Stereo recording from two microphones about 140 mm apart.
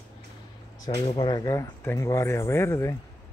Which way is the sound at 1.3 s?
25° left (ahead or behind).